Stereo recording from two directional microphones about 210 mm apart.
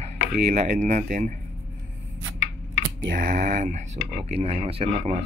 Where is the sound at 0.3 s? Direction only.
40° right (ahead or behind).